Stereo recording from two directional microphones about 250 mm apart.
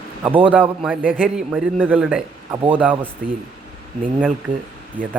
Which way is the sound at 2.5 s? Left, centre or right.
Centre.